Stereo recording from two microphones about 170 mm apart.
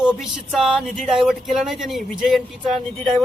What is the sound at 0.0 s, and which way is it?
Speech, 5° right (ahead or behind).